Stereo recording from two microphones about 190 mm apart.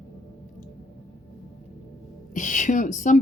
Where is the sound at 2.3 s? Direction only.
40° left (ahead or behind).